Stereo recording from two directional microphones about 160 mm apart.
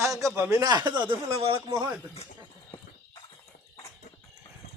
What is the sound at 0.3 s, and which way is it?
A man's voice, 20° right (ahead or behind).